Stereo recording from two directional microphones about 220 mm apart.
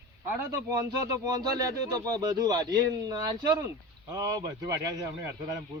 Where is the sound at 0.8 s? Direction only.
15° right (ahead or behind).